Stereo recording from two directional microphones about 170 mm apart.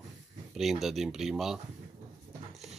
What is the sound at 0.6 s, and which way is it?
Speech, centre (ahead or behind).